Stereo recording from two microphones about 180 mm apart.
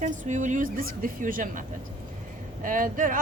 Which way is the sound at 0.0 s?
45° right (ahead or behind).